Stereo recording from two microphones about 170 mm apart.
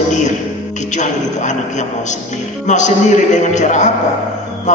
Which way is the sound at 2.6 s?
45° left (ahead or behind).